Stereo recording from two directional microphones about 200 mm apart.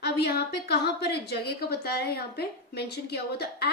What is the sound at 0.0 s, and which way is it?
A woman's voice, 55° left (ahead or behind).